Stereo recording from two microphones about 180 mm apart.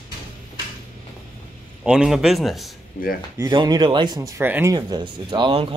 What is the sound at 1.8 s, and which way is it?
Speech, 5° right (ahead or behind).